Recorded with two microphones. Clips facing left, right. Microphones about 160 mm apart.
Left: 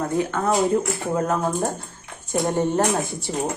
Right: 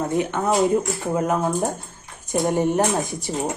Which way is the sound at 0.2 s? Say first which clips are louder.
Left 1 dB; 20° right (ahead or behind).